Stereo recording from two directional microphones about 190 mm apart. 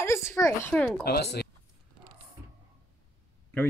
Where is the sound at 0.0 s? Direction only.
15° left (ahead or behind).